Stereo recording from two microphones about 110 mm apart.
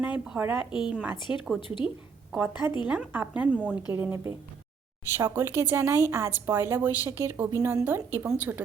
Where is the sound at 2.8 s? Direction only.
15° right (ahead or behind).